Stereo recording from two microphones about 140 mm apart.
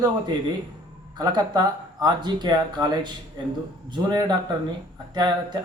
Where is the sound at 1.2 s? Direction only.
30° right (ahead or behind).